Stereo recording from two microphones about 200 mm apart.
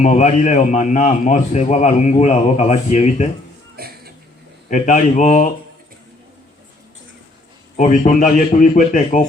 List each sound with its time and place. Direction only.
0.0 s a man's voice: 35° left (ahead or behind)
3.8 s a sound: 50° right (ahead or behind)
4.7 s a man's voice: 40° left (ahead or behind)
7.8 s a man's voice: 40° left (ahead or behind)